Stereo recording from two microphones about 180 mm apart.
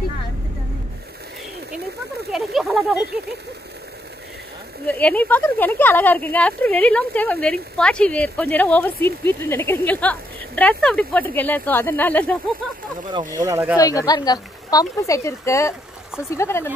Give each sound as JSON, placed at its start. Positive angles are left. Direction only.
{"t": 2.3, "sound": "a sound", "side_deg": 0}
{"t": 4.8, "sound": "speech", "side_deg": 5}
{"t": 13.4, "sound": "speech", "side_deg": -15}
{"t": 13.7, "sound": "speech", "side_deg": 20}